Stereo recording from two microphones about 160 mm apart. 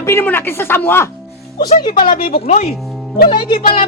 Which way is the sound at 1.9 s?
60° left (ahead or behind).